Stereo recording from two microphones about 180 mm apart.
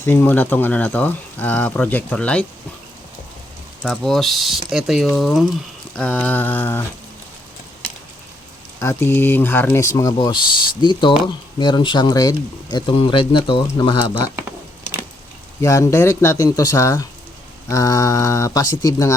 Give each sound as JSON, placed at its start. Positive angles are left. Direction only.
{"t": 0.0, "sound": "speech", "side_deg": 10}
{"t": 3.8, "sound": "speech", "side_deg": 0}
{"t": 8.8, "sound": "speech", "side_deg": 15}
{"t": 15.6, "sound": "speech", "side_deg": 15}